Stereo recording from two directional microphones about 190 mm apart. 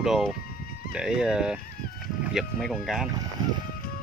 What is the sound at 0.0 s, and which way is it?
Speech, centre (ahead or behind).